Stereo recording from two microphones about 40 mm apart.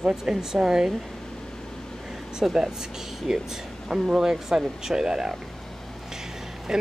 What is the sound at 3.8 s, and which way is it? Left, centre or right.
Speech, centre.